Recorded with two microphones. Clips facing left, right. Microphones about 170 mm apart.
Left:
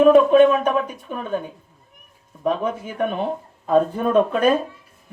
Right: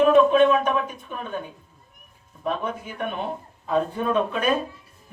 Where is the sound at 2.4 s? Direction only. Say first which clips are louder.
Left 5 dB; 40° left (ahead or behind).